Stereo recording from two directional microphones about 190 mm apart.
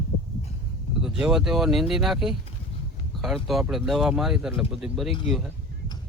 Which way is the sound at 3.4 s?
Centre (ahead or behind).